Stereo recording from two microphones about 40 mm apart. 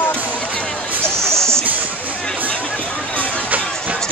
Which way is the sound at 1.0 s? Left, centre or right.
Centre.